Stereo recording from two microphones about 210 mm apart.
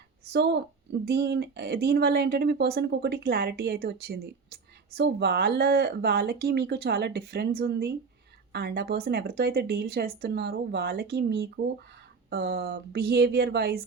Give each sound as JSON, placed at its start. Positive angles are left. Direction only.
{"t": 0.3, "sound": "speech", "side_deg": -55}